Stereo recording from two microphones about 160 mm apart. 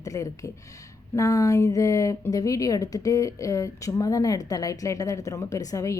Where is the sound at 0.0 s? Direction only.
20° left (ahead or behind).